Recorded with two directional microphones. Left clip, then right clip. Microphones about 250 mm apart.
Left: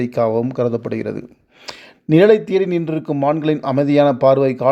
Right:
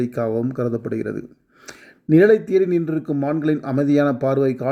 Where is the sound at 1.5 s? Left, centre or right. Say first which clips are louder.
Left 8 dB; centre.